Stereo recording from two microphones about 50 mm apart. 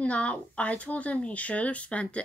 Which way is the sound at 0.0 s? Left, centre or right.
Left.